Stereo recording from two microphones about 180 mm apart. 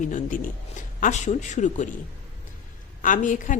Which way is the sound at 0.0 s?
45° left (ahead or behind).